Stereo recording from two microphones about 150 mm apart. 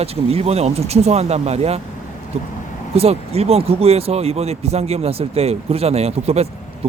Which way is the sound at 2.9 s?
45° right (ahead or behind).